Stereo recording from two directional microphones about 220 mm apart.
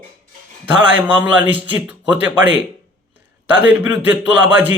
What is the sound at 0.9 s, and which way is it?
A man's voice, 5° right (ahead or behind).